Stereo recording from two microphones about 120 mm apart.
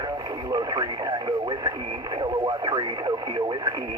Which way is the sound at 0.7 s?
35° right (ahead or behind).